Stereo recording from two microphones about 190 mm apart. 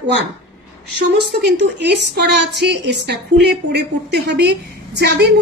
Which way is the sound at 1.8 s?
60° right (ahead or behind).